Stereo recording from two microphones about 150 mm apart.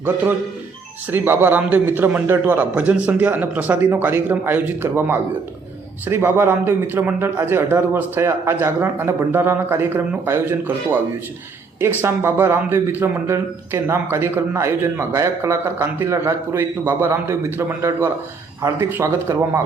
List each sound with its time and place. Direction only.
1.1 s a man's voice: 15° right (ahead or behind)